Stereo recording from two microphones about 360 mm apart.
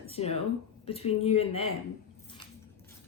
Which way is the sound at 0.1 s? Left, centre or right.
Centre.